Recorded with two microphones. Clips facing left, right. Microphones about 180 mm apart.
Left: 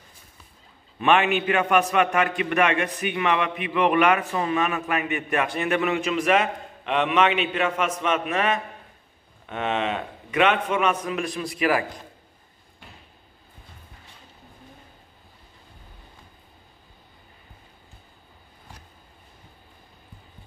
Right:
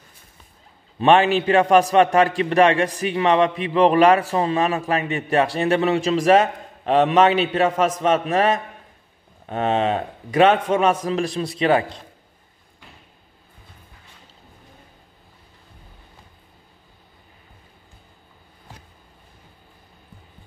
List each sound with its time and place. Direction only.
0.9 s a man's voice: 35° right (ahead or behind)